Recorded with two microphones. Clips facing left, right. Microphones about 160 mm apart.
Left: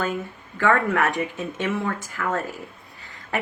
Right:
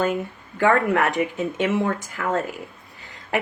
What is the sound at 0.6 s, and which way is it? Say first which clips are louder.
Speech: right 2 dB; 20° right (ahead or behind).